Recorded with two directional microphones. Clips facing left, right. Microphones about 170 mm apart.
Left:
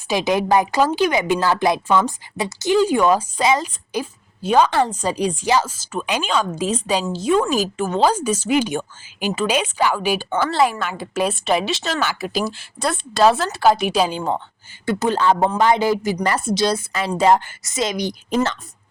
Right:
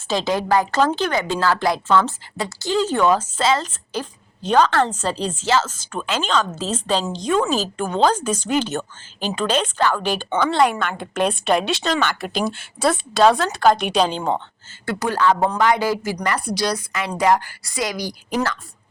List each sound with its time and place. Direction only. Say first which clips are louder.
0.1 s a woman's voice: left 2 dB; 15° left (ahead or behind)
14.8 s a woman's voice: left 1 dB; 20° left (ahead or behind)